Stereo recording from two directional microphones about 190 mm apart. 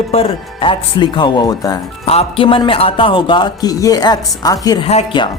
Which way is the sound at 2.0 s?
30° left (ahead or behind).